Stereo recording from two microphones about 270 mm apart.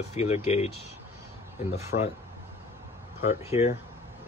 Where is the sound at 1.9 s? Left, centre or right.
Left.